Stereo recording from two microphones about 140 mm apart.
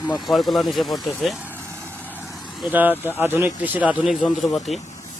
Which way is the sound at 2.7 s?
15° right (ahead or behind).